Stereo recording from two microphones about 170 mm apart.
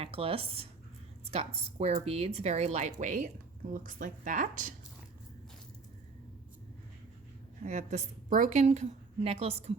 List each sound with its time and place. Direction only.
0.0 s a woman's voice: 35° right (ahead or behind); by 4.7 s 50° right (ahead or behind)
7.6 s a woman's voice: 45° right (ahead or behind)